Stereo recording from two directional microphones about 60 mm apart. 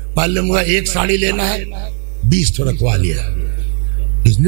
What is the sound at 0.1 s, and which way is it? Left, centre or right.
A man's voice, right.